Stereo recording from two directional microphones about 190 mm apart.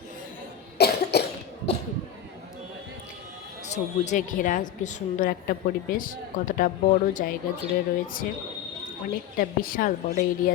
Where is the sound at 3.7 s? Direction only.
40° left (ahead or behind).